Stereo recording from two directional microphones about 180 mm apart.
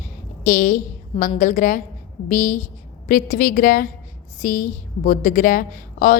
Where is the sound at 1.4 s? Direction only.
45° left (ahead or behind).